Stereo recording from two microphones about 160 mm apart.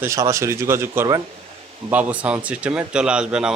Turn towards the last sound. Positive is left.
turn(degrees=-5)  # may be behind; listen again after turning